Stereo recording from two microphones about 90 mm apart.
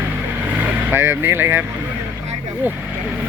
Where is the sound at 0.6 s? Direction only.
25° right (ahead or behind).